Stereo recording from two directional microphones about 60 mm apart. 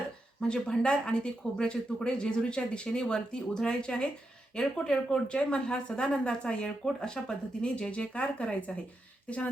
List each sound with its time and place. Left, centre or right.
0.4 s speech: centre